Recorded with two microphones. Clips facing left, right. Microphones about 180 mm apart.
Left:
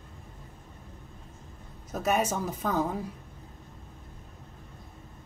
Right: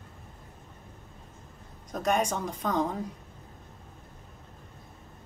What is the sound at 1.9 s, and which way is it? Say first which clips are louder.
Speech: even; 5° left (ahead or behind).